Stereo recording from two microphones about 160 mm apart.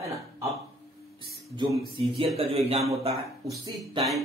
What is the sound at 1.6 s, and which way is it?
Speech, 35° right (ahead or behind).